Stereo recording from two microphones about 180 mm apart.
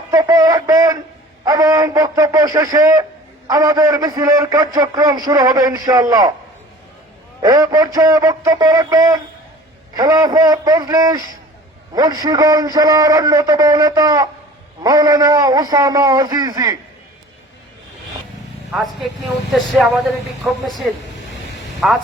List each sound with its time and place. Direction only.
0.1 s a man's voice: 20° right (ahead or behind)
7.4 s a man's voice: 20° right (ahead or behind)
18.7 s speech: 5° right (ahead or behind)
21.8 s speech: centre (ahead or behind)